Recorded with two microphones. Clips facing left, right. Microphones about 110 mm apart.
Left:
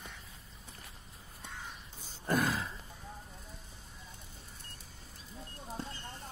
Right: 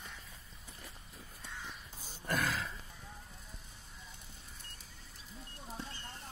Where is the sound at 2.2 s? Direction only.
20° left (ahead or behind).